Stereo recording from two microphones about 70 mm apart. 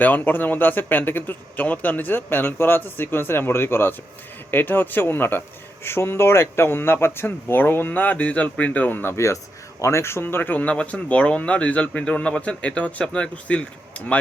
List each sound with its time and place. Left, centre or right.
0.0 s speech: left
9.1 s speech: left; by 14.2 s centre